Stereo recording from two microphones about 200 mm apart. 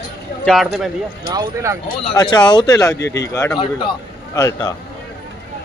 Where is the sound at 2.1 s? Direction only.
20° left (ahead or behind).